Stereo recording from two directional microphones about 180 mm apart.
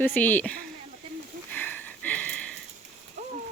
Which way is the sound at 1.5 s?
10° left (ahead or behind).